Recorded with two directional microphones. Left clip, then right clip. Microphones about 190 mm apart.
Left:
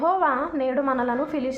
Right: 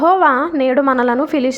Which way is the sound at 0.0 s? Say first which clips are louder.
Right 9 dB; 40° right (ahead or behind).